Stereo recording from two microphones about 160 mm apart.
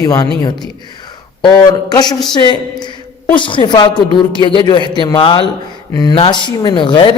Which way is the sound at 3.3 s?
30° left (ahead or behind).